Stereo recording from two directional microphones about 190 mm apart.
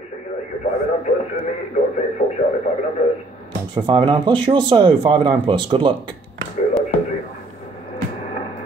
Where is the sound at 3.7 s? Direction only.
25° right (ahead or behind).